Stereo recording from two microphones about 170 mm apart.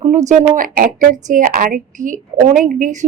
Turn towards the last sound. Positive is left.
turn(degrees=-45)  # may be behind; listen again after turning